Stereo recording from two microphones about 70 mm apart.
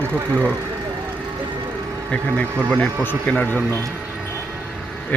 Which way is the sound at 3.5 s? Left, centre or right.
Left.